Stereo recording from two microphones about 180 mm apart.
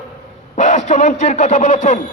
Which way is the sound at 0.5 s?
40° left (ahead or behind).